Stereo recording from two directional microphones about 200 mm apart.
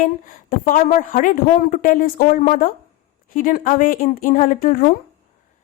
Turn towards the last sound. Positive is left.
turn(degrees=45)  # may be behind; listen again after turning